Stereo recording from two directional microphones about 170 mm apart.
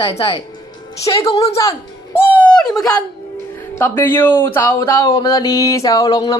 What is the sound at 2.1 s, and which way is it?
Music, 10° left (ahead or behind).